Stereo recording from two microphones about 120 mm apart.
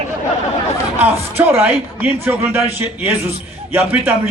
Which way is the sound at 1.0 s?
15° right (ahead or behind).